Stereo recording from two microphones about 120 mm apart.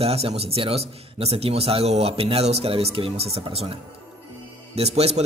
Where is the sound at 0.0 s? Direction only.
55° right (ahead or behind).